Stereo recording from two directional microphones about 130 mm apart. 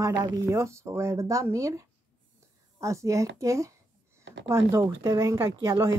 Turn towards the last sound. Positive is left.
turn(degrees=-20)  # may be behind; listen again after turning